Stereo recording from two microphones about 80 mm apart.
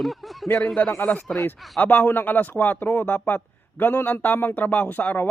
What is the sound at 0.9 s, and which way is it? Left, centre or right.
A man's voice, left.